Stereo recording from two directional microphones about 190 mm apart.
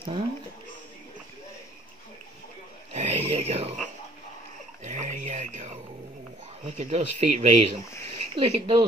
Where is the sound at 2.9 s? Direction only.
35° right (ahead or behind).